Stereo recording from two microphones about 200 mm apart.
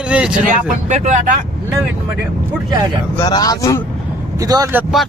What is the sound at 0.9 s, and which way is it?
Speech, 35° right (ahead or behind).